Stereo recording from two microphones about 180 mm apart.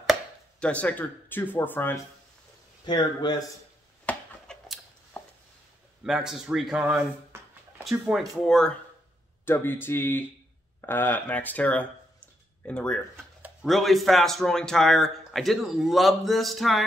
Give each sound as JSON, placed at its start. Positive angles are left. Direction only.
{"t": 0.0, "sound": "speech", "side_deg": 0}
{"t": 2.8, "sound": "speech", "side_deg": 25}
{"t": 4.0, "sound": "a sound", "side_deg": 5}
{"t": 6.0, "sound": "speech", "side_deg": -5}
{"t": 7.3, "sound": "a sound", "side_deg": -15}
{"t": 8.0, "sound": "speech", "side_deg": 0}